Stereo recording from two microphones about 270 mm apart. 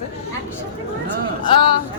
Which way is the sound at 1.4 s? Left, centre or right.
Centre.